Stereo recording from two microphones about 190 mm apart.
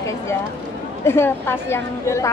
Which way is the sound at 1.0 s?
10° left (ahead or behind).